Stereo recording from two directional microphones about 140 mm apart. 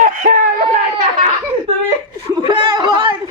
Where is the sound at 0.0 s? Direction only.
80° right.